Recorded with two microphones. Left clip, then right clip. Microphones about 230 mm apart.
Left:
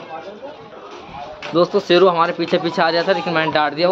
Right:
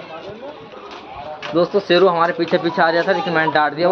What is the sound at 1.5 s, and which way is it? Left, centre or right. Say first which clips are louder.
A man's voice: left 1 dB; centre.